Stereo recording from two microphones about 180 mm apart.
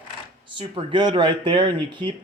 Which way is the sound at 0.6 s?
30° right (ahead or behind).